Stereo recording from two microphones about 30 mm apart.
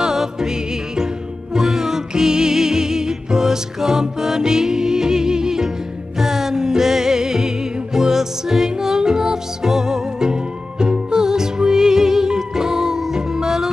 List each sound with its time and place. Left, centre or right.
0.0 s music: centre